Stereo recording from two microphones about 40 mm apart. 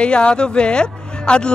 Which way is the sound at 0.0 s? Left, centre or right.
Left.